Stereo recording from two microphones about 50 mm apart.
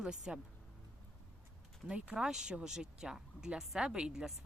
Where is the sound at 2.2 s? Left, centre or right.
Centre.